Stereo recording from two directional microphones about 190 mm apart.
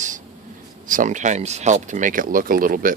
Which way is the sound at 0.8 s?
40° right (ahead or behind).